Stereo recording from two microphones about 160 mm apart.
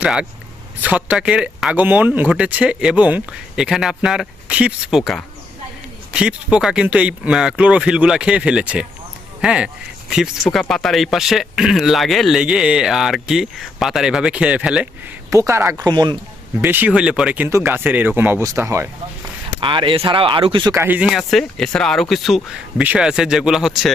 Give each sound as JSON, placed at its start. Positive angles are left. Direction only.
{"t": 0.0, "sound": "speech", "side_deg": -5}
{"t": 15.3, "sound": "speech", "side_deg": -20}
{"t": 16.6, "sound": "speech", "side_deg": -10}
{"t": 19.5, "sound": "speech", "side_deg": -30}
{"t": 20.7, "sound": "speech", "side_deg": -10}
{"t": 21.1, "sound": "speech", "side_deg": 0}